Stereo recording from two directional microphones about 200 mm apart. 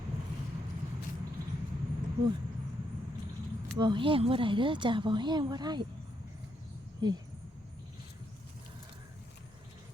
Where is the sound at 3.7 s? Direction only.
25° right (ahead or behind).